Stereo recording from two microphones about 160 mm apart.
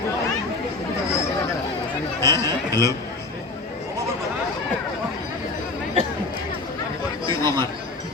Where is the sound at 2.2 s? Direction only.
20° left (ahead or behind).